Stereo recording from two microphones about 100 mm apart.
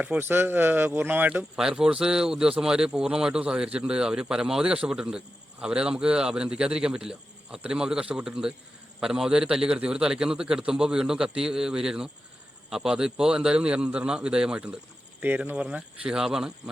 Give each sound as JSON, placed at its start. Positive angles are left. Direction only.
{"t": 0.0, "sound": "speech", "side_deg": -20}
{"t": 1.5, "sound": "speech", "side_deg": -5}